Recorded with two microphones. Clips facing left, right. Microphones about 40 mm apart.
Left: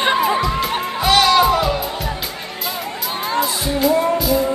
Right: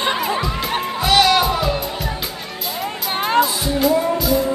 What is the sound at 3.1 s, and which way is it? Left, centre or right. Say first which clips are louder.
Music: right 3 dB; right.